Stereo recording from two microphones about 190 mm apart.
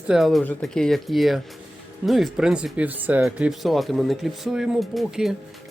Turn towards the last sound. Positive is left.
turn(degrees=0)  # may be behind; listen again after turning